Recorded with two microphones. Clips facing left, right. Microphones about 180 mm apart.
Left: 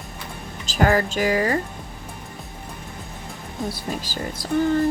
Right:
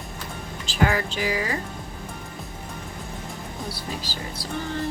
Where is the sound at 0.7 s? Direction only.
45° left (ahead or behind).